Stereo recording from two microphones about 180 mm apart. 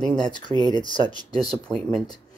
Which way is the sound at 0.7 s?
25° left (ahead or behind).